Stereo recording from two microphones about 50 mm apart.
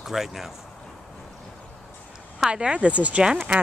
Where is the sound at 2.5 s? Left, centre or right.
Right.